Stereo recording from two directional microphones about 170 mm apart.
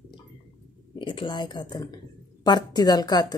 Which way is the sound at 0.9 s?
30° left (ahead or behind).